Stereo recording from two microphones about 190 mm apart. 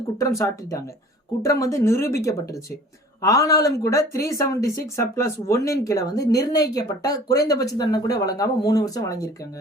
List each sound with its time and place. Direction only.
0.2 s speech: 15° left (ahead or behind)